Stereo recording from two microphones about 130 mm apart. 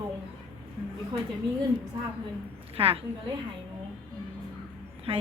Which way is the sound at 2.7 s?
45° right (ahead or behind).